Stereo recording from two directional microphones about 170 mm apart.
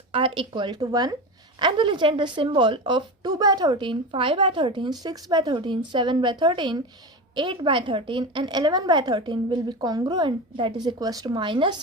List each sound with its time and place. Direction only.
0.1 s a woman's voice: 30° right (ahead or behind)